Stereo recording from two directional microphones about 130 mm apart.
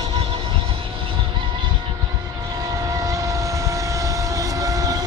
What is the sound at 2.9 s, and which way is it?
Vehicle, 25° right (ahead or behind).